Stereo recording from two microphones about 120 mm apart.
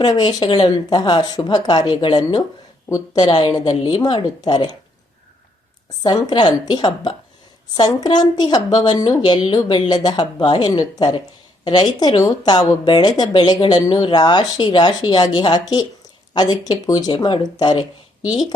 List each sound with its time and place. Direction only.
0.0 s speech: 35° left (ahead or behind)
6.0 s speech: 35° left (ahead or behind)